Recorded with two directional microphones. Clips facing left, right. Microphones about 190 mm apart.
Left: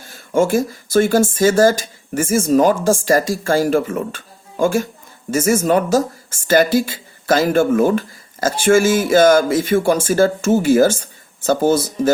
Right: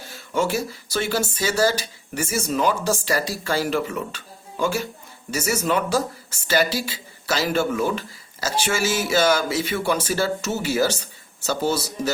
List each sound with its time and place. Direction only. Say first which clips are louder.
0.0 s speech: left 7 dB; 50° left (ahead or behind)